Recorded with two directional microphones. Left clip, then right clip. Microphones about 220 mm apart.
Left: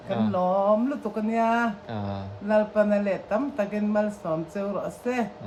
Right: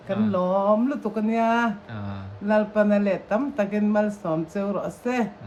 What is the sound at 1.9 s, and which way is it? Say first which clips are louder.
Speech: left 4 dB; 20° left (ahead or behind).